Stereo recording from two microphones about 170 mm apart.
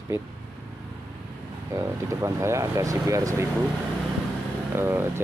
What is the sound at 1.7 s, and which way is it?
Speech, 15° right (ahead or behind).